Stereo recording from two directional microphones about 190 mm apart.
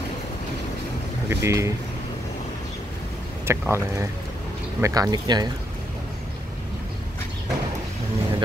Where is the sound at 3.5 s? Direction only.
15° right (ahead or behind).